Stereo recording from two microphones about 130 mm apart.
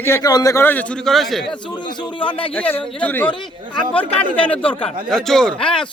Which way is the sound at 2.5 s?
10° left (ahead or behind).